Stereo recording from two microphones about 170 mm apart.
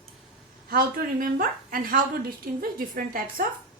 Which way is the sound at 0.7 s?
55° right (ahead or behind).